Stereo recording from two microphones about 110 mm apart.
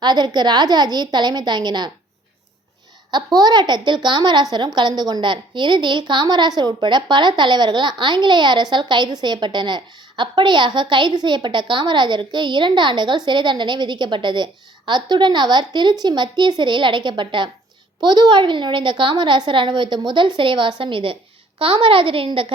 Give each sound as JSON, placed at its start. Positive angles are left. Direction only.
{"t": 0.0, "sound": "a woman's voice", "side_deg": -40}
{"t": 3.1, "sound": "speech", "side_deg": -40}